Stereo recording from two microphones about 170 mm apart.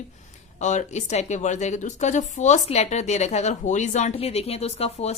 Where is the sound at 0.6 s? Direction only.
45° left (ahead or behind).